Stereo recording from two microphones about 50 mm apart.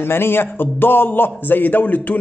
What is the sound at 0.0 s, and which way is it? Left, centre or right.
A man's voice, left.